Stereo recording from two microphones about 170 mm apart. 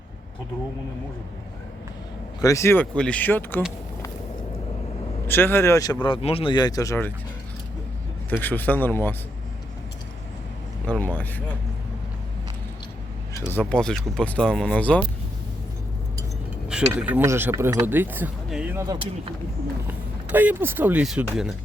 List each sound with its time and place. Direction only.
2.4 s speech: 20° left (ahead or behind)
5.3 s speech: 15° left (ahead or behind)
8.3 s speech: 10° left (ahead or behind)
10.8 s speech: 10° left (ahead or behind)
13.5 s speech: 10° left (ahead or behind)
16.6 s speech: 5° right (ahead or behind)
20.3 s speech: 10° right (ahead or behind)